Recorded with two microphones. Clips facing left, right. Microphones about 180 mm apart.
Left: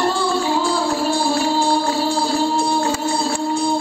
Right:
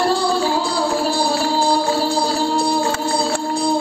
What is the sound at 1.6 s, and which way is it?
Music, 35° right (ahead or behind).